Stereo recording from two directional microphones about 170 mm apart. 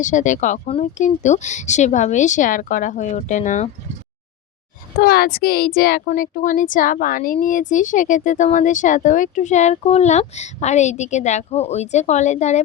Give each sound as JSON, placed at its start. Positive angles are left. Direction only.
{"t": 0.0, "sound": "speech", "side_deg": 45}
{"t": 4.9, "sound": "a woman's voice", "side_deg": 60}
{"t": 6.1, "sound": "speech", "side_deg": 50}